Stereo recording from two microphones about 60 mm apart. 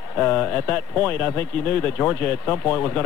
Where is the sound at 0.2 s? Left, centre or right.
Left.